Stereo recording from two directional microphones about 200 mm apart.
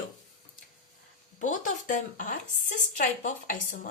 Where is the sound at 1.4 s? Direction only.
40° left (ahead or behind).